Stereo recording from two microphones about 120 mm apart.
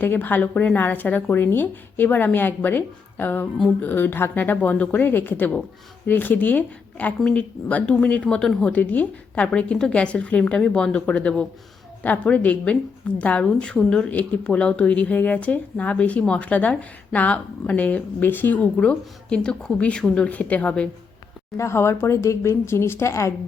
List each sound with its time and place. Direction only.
0.0 s a woman's voice: 15° left (ahead or behind)
21.6 s speech: 20° left (ahead or behind)